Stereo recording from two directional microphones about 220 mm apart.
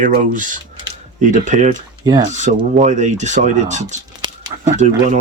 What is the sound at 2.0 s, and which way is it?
Speech, 15° right (ahead or behind).